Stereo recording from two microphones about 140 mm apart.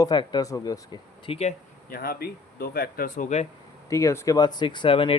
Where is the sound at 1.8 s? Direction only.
90° left; by 3.5 s 55° left (ahead or behind).